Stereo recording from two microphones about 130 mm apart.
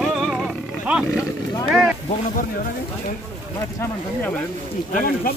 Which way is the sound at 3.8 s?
10° left (ahead or behind).